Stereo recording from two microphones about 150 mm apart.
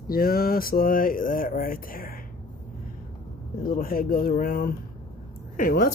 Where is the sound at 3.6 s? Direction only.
75° left (ahead or behind).